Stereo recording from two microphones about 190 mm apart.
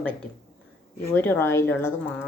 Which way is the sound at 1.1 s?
10° left (ahead or behind).